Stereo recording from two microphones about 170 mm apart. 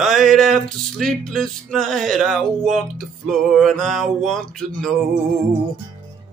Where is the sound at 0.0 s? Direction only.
Centre (ahead or behind).